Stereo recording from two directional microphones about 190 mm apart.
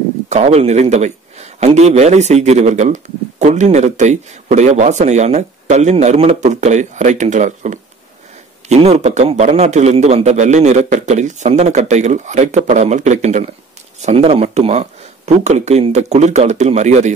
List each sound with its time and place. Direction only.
0.3 s speech: 35° right (ahead or behind)